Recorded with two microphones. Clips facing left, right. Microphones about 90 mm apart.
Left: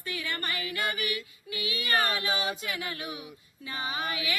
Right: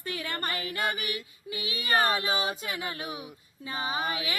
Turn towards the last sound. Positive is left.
turn(degrees=-30)  # may be behind; listen again after turning